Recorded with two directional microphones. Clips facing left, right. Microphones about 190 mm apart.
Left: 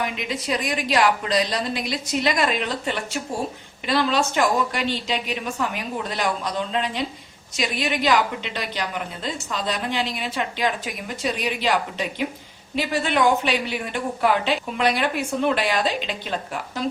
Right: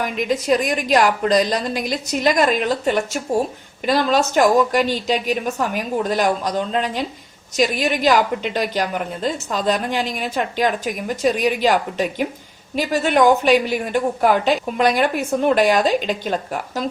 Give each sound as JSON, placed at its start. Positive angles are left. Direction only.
{"t": 0.0, "sound": "a woman's voice", "side_deg": -45}